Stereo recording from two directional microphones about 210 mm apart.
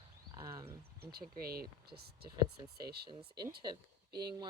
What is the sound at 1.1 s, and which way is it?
Speech, 45° right (ahead or behind).